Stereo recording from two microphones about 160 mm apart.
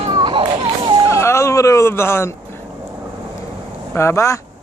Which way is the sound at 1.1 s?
15° left (ahead or behind).